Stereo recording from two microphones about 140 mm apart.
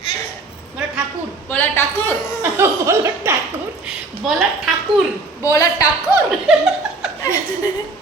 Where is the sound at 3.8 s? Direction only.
5° right (ahead or behind).